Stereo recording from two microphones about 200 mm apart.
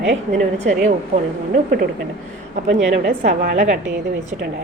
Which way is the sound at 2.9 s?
45° right (ahead or behind).